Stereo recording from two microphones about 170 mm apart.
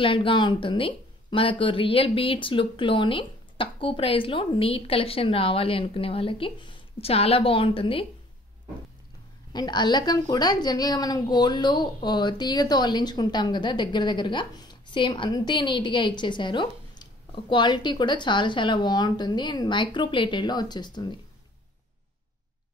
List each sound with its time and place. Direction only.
0.0 s speech: 30° left (ahead or behind)
9.5 s a woman's voice: 25° left (ahead or behind)